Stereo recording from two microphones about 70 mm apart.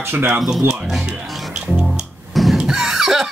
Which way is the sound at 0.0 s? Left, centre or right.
Right.